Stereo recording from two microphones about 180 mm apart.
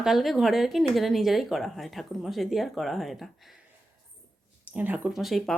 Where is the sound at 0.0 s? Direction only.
Centre (ahead or behind).